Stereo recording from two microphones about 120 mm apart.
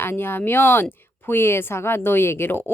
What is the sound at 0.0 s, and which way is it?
A woman's voice, 20° left (ahead or behind).